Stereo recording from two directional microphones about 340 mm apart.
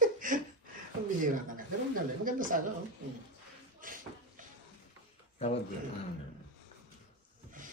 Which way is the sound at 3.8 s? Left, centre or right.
Right.